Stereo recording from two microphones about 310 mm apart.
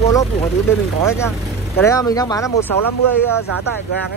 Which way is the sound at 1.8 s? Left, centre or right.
Centre.